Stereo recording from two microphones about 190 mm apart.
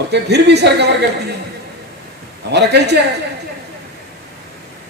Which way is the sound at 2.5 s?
60° right (ahead or behind).